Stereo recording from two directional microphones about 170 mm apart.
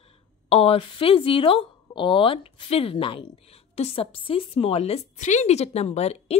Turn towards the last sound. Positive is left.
turn(degrees=40)  # may be behind; listen again after turning